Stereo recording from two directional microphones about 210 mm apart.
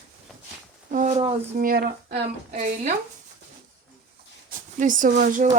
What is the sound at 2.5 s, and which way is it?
Speech, 30° right (ahead or behind).